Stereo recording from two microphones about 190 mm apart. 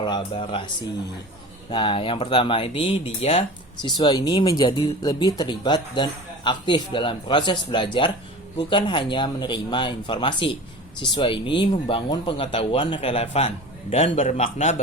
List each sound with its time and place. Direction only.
0.0 s speech: 25° left (ahead or behind)
1.7 s a man's voice: 25° left (ahead or behind)